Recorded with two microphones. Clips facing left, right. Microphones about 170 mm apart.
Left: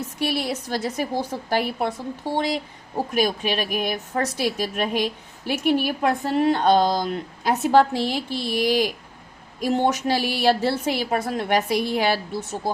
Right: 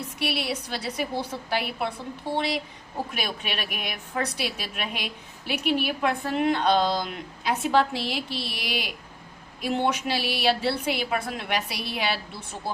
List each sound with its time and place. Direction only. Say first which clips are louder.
0.3 s a woman's voice: left 3 dB; 45° left (ahead or behind)
3.1 s a woman's voice: left 9 dB; 40° left (ahead or behind)